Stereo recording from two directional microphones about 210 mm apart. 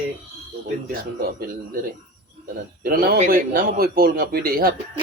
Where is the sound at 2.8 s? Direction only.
45° right (ahead or behind).